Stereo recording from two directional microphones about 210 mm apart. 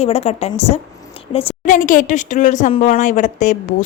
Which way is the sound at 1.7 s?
40° left (ahead or behind).